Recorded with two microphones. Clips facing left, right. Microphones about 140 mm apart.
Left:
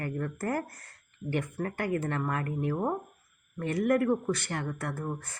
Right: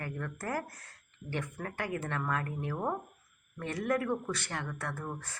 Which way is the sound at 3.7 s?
55° left (ahead or behind).